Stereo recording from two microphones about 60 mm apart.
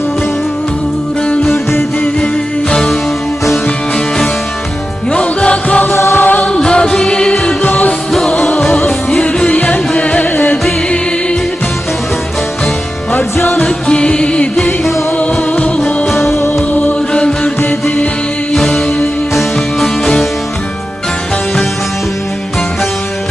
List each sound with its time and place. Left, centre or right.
2.2 s music: centre
5.1 s music: centre
5.9 s music: left
6.5 s music: centre
8.9 s music: centre
9.2 s music: left
13.1 s music: left
13.7 s music: centre
16.1 s music: left
17.1 s mantra: centre
17.6 s music: left
18.5 s music: centre